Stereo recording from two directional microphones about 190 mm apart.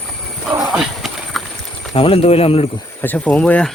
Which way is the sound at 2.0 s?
30° left (ahead or behind).